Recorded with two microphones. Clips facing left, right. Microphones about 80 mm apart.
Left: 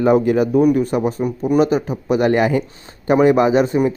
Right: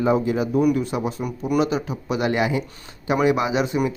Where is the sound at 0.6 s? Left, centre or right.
Left.